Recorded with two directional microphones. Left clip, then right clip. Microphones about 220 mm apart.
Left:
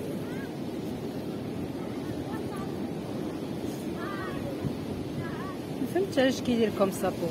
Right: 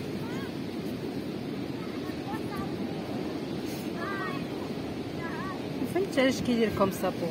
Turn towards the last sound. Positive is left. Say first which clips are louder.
# even
turn(degrees=0)  # may be behind; listen again after turning